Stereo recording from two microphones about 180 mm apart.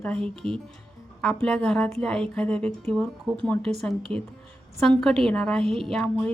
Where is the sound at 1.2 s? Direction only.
5° left (ahead or behind).